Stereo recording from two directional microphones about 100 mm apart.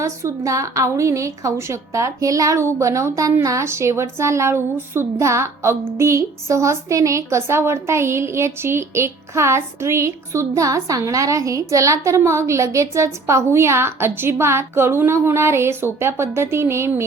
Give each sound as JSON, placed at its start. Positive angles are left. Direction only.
{"t": 0.0, "sound": "a woman's voice", "side_deg": -30}